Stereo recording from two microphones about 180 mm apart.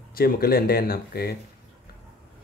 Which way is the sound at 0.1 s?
55° left (ahead or behind).